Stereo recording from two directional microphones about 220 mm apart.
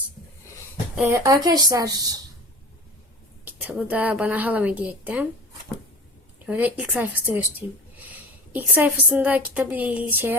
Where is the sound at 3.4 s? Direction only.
5° right (ahead or behind).